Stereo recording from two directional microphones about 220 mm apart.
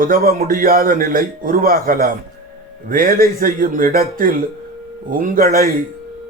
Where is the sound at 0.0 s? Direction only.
40° right (ahead or behind).